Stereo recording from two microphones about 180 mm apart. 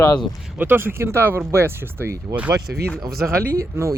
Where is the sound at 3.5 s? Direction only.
15° right (ahead or behind).